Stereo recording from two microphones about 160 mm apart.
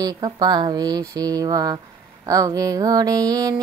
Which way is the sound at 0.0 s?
25° right (ahead or behind).